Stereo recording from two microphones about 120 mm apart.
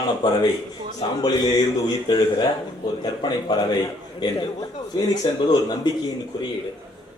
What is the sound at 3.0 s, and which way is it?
A man's voice, 35° left (ahead or behind).